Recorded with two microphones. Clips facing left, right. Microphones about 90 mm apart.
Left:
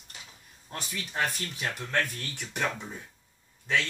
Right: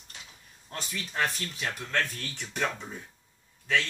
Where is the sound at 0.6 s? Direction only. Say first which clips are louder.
Even; 15° left (ahead or behind).